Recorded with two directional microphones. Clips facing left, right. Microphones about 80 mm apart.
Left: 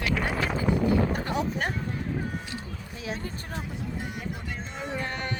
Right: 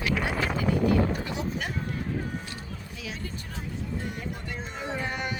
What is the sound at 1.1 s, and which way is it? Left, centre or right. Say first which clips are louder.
Boat: left 3 dB; left.